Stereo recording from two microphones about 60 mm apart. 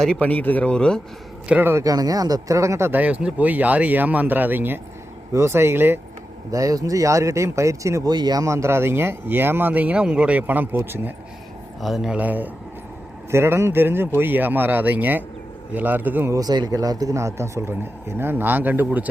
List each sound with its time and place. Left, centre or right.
0.2 s speech: left
1.8 s speech: right
2.9 s speech: right
5.3 s speech: right
6.5 s speech: right
8.4 s speech: right
10.0 s speech: centre; by 11.1 s right
11.8 s speech: centre
12.1 s speech: right
13.3 s speech: right
16.3 s speech: right
17.2 s speech: right
18.2 s speech: right